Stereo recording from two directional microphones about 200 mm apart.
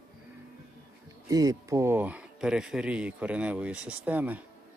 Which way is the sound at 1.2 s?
20° right (ahead or behind).